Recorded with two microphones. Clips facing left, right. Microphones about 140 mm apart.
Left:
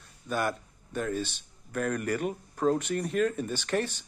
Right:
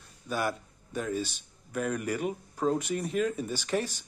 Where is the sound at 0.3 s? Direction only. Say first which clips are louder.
Left 1 dB; 5° right (ahead or behind).